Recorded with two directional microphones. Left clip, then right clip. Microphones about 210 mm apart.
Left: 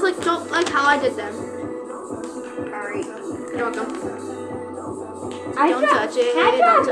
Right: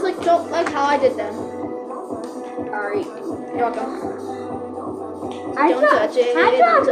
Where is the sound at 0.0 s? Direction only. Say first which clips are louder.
Right 3 dB; 40° left (ahead or behind).